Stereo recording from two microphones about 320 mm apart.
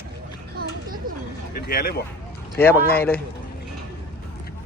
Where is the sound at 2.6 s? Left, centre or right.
Centre.